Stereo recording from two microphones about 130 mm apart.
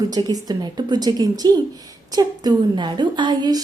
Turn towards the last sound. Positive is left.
turn(degrees=-30)  # may be behind; listen again after turning